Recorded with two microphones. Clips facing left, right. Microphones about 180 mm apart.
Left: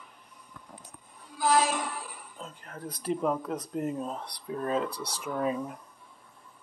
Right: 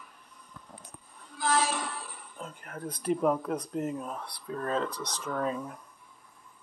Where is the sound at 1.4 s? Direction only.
15° left (ahead or behind).